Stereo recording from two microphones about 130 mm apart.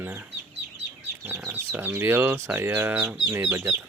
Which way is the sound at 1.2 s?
15° right (ahead or behind).